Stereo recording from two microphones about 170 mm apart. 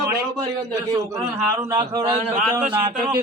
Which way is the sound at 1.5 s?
15° right (ahead or behind).